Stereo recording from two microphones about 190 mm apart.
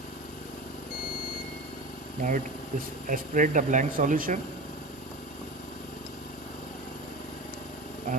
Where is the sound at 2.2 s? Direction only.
45° right (ahead or behind).